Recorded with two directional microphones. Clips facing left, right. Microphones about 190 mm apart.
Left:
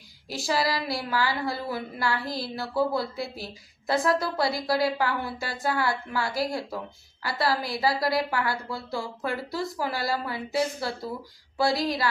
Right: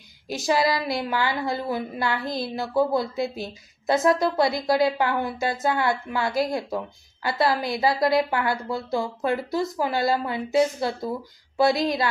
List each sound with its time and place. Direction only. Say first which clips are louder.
0.3 s a woman's voice: right 4 dB; 20° right (ahead or behind)